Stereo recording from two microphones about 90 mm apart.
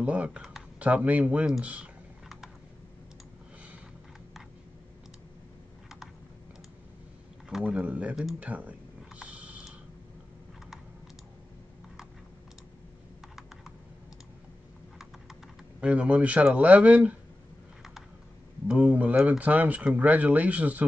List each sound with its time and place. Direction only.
0.0 s speech: 15° right (ahead or behind)
7.4 s a man's voice: 10° right (ahead or behind)
8.4 s a sound: 15° right (ahead or behind)
15.8 s speech: 15° right (ahead or behind)
18.7 s speech: 15° right (ahead or behind)